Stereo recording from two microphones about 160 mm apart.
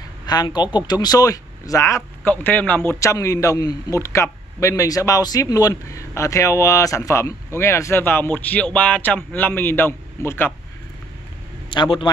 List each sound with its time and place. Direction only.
0.3 s speech: 25° left (ahead or behind)
11.7 s a man's voice: 30° left (ahead or behind)